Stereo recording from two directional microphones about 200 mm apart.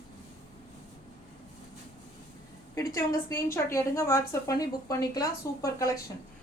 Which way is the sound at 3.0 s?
15° left (ahead or behind).